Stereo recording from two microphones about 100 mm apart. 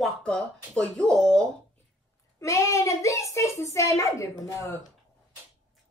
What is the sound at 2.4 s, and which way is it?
A child's voice, 30° left (ahead or behind).